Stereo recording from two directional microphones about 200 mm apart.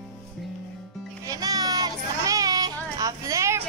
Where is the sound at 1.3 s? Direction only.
20° right (ahead or behind).